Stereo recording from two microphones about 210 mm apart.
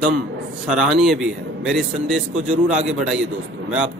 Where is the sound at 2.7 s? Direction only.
5° right (ahead or behind).